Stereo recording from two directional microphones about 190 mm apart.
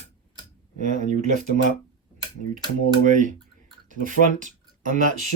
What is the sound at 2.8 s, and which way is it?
Speech, 45° right (ahead or behind).